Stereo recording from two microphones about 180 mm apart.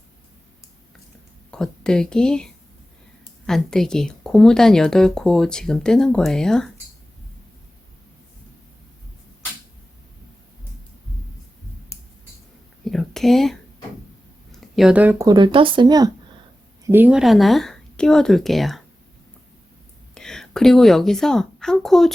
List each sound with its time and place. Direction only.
1.5 s speech: 5° left (ahead or behind)
12.8 s a sound: centre (ahead or behind)
14.8 s speech: 5° right (ahead or behind)
15.3 s speech: 25° right (ahead or behind)
16.8 s speech: 10° right (ahead or behind)
20.1 s a woman's voice: 5° left (ahead or behind)